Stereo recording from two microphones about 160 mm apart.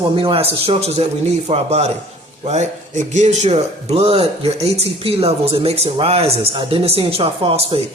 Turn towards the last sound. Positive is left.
turn(degrees=-35)  # may be behind; listen again after turning